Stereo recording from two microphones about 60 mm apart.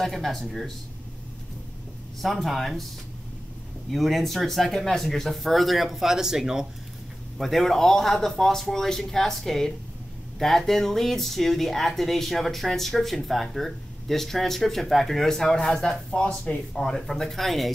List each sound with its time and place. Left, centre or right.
0.0 s speech: centre
2.2 s speech: centre
3.9 s speech: centre
7.3 s speech: centre